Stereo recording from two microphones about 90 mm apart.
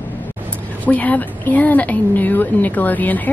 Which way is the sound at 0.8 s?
15° left (ahead or behind).